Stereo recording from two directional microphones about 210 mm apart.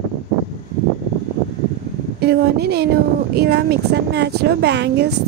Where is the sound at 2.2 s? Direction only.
50° right (ahead or behind).